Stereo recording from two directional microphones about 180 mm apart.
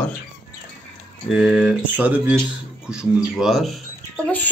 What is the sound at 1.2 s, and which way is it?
Speech, centre (ahead or behind).